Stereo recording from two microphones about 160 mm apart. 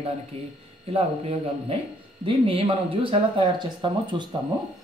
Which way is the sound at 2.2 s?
35° right (ahead or behind).